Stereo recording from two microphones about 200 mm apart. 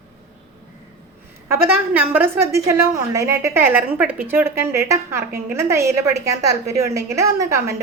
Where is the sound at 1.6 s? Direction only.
10° right (ahead or behind).